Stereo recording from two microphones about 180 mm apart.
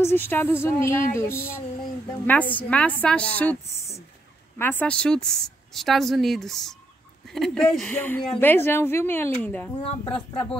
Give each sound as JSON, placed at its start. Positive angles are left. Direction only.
{"t": 0.0, "sound": "a woman's voice", "side_deg": 10}
{"t": 9.8, "sound": "speech", "side_deg": 30}